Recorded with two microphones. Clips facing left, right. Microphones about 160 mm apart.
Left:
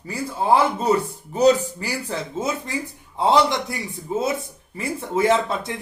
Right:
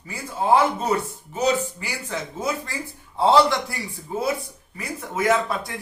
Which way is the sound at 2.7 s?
20° left (ahead or behind).